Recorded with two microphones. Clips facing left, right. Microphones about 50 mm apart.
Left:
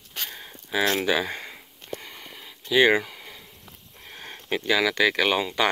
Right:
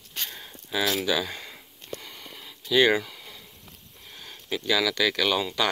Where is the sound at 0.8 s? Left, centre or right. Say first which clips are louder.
Left 3 dB; left.